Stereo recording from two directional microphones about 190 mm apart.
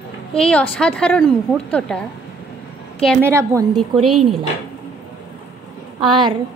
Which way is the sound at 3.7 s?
Centre (ahead or behind).